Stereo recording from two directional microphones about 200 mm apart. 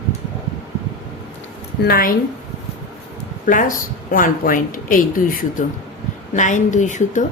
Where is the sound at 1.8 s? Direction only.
50° left (ahead or behind).